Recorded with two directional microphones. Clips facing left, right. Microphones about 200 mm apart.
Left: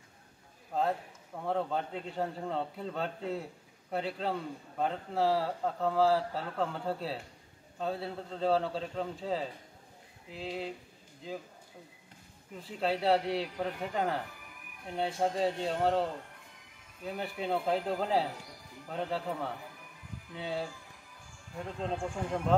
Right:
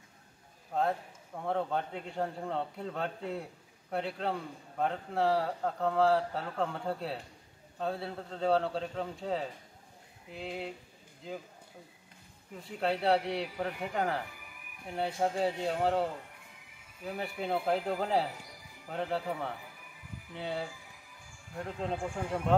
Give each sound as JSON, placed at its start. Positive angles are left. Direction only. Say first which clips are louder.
{"t": 1.4, "sound": "a man's voice", "louder": "even", "side_deg": 0}
{"t": 12.5, "sound": "a man's voice", "louder": "even", "side_deg": 0}